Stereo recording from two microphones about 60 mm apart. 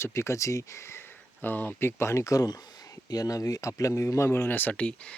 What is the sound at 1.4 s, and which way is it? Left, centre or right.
Speech, left.